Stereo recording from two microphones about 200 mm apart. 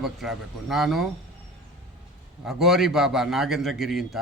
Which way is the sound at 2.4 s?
Centre (ahead or behind).